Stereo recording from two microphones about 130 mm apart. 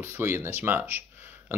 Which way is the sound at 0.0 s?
20° right (ahead or behind).